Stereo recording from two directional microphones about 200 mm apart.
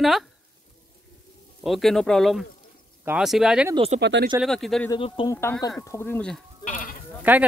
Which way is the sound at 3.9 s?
50° right (ahead or behind).